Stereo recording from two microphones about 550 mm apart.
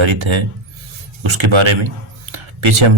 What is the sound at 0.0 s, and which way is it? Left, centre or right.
Speech, right.